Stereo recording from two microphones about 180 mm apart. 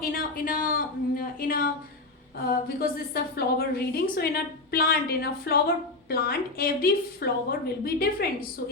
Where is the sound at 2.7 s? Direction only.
60° left (ahead or behind).